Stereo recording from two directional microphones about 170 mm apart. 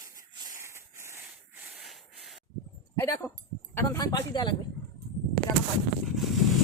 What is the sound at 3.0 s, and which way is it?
A woman's voice, 15° left (ahead or behind).